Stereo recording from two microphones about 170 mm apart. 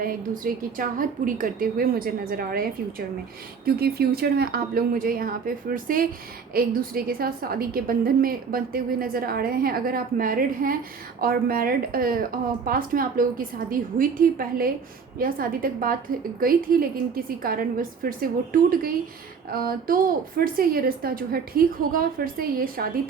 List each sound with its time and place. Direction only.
0.0 s a woman's voice: 55° right (ahead or behind)
3.7 s a woman's voice: 65° right (ahead or behind)